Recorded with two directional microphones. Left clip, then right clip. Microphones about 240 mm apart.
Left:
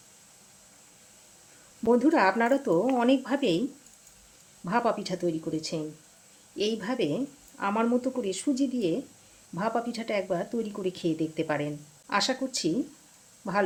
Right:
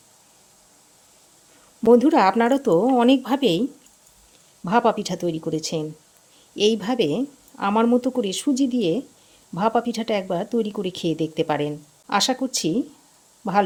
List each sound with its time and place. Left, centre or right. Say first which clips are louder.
1.9 s speech: right 7 dB; right
4.6 s speech: right 7 dB; right